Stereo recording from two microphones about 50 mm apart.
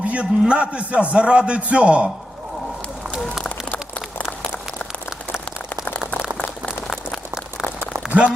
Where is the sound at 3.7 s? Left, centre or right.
Left.